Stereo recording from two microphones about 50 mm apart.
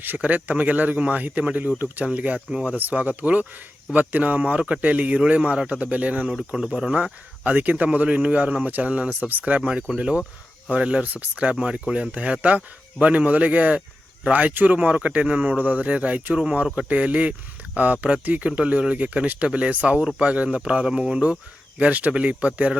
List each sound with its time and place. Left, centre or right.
0.0 s speech: right
2.5 s speech: centre
2.7 s speech: right
5.5 s speech: centre
5.8 s speech: right
6.6 s speech: centre
6.9 s speech: right
11.0 s speech: right